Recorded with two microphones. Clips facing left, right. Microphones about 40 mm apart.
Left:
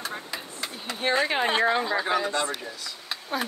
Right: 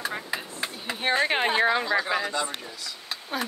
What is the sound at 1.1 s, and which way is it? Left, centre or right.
Speech, right.